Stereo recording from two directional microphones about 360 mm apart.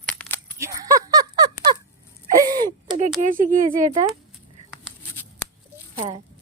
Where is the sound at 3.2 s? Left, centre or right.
Right.